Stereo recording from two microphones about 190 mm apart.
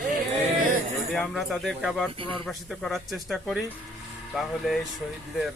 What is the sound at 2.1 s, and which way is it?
Speech, 25° right (ahead or behind).